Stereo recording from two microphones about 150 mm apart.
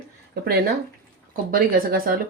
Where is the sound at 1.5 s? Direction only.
75° right (ahead or behind).